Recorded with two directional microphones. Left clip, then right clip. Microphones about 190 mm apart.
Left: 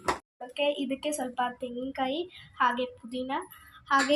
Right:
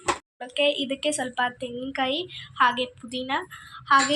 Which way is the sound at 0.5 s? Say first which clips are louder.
Right 5 dB; centre (ahead or behind).